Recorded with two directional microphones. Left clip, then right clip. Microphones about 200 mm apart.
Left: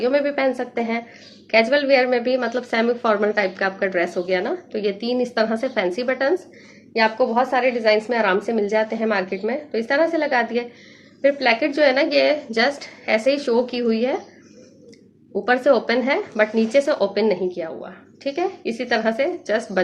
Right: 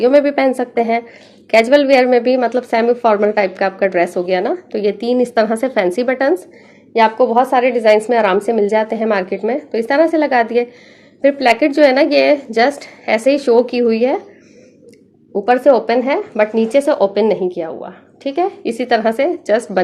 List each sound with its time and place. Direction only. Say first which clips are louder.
0.0 s a woman's voice: right 8 dB; 45° right (ahead or behind)
15.3 s speech: right 6 dB; 30° right (ahead or behind); by 19.8 s 50° right (ahead or behind)